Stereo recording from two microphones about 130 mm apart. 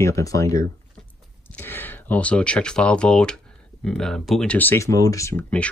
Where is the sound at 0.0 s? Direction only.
25° left (ahead or behind); by 4.6 s 5° left (ahead or behind).